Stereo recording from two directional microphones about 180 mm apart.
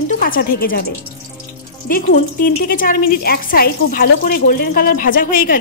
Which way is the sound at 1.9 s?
50° left (ahead or behind).